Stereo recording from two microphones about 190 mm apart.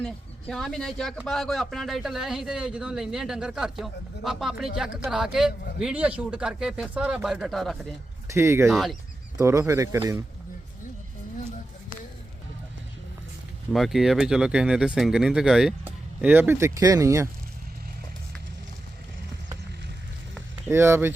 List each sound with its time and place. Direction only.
0.0 s a man's voice: centre (ahead or behind)
8.3 s speech: 15° right (ahead or behind)
8.7 s a man's voice: centre (ahead or behind)
9.4 s speech: 15° right (ahead or behind)
13.7 s a man's voice: centre (ahead or behind); by 17.2 s 15° right (ahead or behind)
20.7 s speech: 15° right (ahead or behind)